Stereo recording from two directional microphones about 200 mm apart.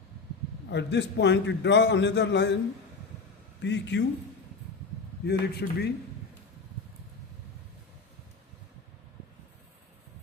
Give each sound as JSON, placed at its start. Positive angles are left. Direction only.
{"t": 0.7, "sound": "a man's voice", "side_deg": 60}
{"t": 3.6, "sound": "a man's voice", "side_deg": 60}
{"t": 5.2, "sound": "a man's voice", "side_deg": 55}